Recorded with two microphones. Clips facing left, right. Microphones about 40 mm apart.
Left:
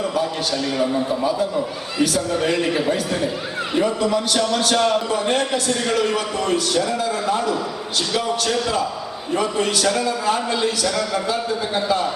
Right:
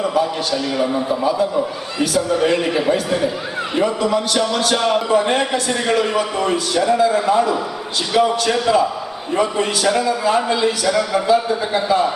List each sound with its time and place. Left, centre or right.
0.2 s a man's voice: centre